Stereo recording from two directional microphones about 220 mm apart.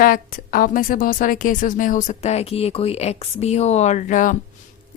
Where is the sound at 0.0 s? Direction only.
40° left (ahead or behind).